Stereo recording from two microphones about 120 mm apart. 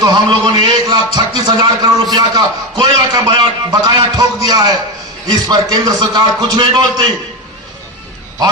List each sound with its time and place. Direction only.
0.0 s a man's voice: 35° right (ahead or behind)